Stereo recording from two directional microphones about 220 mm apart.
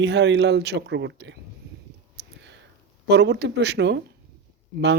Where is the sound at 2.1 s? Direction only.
55° right (ahead or behind).